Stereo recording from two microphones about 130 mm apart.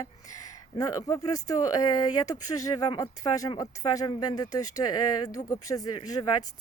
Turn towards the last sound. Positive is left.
turn(degrees=35)  # may be behind; listen again after turning